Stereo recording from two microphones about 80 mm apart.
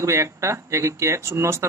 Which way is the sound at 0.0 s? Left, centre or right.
Right.